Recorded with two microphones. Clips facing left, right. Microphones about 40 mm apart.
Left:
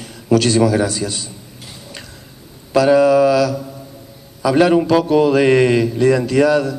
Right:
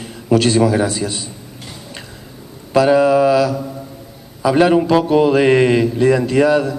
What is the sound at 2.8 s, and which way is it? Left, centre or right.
A man's voice, right.